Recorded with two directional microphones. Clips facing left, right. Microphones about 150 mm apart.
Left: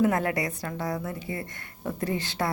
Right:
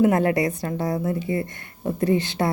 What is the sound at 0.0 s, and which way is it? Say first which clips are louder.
Speech: right 6 dB; 25° right (ahead or behind).